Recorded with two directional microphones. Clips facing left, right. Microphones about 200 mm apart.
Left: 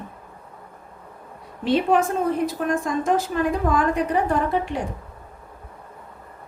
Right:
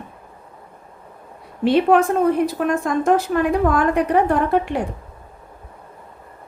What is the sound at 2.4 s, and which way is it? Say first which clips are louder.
A woman's voice: right 3 dB; 60° right (ahead or behind).